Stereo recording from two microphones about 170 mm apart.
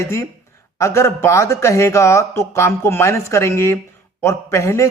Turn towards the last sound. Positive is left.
turn(degrees=15)  # may be behind; listen again after turning